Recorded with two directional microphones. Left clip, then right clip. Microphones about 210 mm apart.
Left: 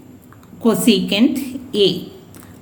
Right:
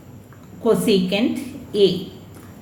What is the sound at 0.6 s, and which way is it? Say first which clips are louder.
Speech: left 1 dB; 50° left (ahead or behind).